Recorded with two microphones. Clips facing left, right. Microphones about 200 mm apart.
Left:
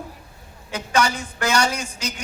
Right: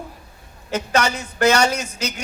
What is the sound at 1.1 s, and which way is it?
Speech, 65° right (ahead or behind).